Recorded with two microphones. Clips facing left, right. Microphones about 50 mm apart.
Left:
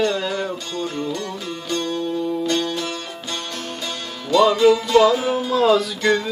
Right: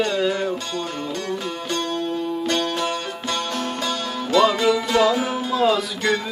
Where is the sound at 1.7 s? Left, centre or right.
Right.